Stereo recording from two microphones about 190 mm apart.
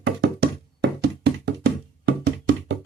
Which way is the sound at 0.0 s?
65° right (ahead or behind).